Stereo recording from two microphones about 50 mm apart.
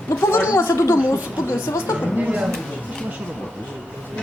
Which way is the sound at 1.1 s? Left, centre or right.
Left.